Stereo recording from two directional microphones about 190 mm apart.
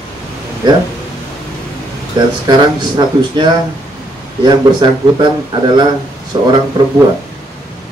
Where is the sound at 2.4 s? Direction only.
20° right (ahead or behind).